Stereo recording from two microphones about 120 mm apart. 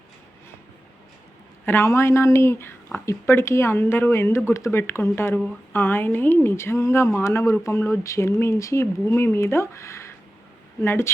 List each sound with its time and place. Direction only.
1.6 s speech: 20° left (ahead or behind)